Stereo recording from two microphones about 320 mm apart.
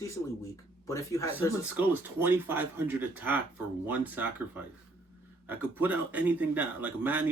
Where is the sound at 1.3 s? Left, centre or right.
Centre.